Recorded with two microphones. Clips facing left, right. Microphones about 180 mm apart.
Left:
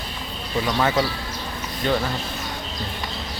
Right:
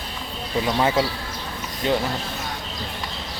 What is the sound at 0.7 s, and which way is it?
Speech, 25° right (ahead or behind).